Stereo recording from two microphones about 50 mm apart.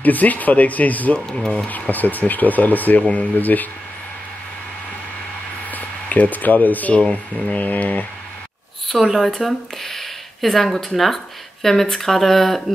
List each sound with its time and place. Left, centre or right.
0.0 s speech: left
1.3 s speech: centre
1.7 s speech: left
5.7 s speech: left
8.8 s speech: centre